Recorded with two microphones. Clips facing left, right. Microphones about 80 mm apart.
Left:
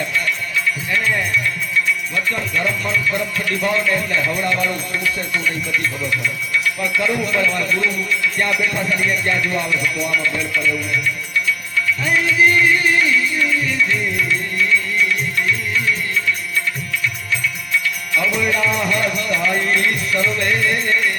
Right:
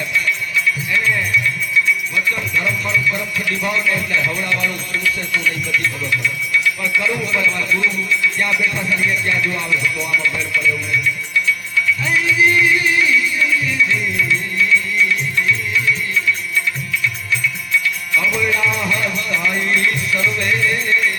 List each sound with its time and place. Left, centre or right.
0.9 s music: left
6.8 s speech: left
12.0 s music: left
18.2 s music: left